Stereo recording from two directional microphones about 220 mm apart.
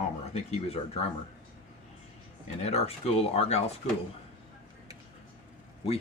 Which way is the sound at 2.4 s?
30° left (ahead or behind).